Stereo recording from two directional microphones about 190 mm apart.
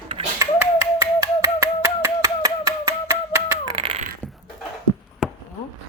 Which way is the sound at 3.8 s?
30° right (ahead or behind).